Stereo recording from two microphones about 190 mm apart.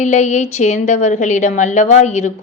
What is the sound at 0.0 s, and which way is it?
A woman's voice, 40° left (ahead or behind).